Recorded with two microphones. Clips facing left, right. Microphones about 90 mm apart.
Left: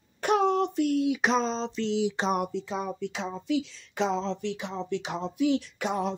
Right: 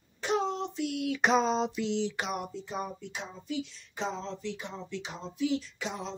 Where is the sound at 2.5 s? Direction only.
90° left; by 6.1 s 55° left (ahead or behind).